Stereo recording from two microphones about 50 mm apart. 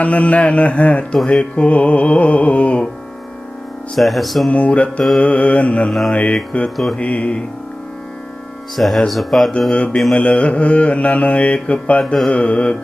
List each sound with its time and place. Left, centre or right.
0.0 s mantra: left
3.9 s speech: centre
4.4 s mantra: left
8.7 s speech: centre
9.7 s mantra: left